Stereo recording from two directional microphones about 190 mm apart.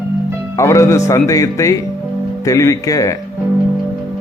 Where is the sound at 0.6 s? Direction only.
15° left (ahead or behind).